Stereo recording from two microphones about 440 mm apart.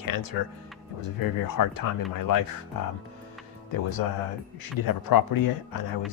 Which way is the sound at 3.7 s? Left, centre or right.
Left.